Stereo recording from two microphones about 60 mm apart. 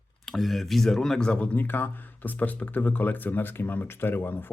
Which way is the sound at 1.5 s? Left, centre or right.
Left.